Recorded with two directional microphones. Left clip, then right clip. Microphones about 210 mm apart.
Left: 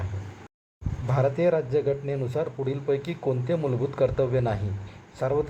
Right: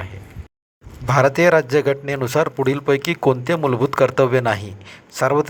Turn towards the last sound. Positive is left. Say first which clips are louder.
# right 9 dB
turn(degrees=-35)  # may be behind; listen again after turning